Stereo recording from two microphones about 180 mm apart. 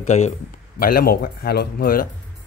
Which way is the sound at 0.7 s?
55° left (ahead or behind).